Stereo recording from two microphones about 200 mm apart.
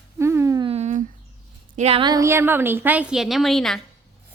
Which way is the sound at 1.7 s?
30° right (ahead or behind).